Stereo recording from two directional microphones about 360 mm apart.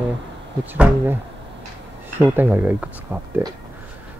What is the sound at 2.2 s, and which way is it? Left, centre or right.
Speech, centre.